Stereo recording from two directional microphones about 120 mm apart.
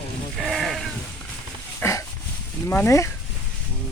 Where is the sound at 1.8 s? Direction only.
25° left (ahead or behind).